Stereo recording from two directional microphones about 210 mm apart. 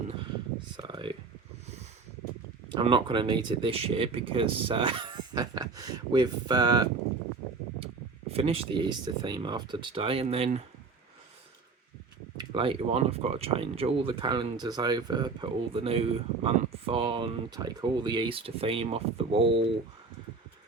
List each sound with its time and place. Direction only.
0.8 s a sound: 20° right (ahead or behind)
2.6 s speech: 25° right (ahead or behind)
8.3 s speech: 25° right (ahead or behind)
12.4 s speech: 25° right (ahead or behind)